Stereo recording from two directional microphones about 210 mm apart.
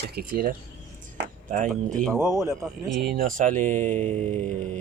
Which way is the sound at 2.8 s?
Centre (ahead or behind).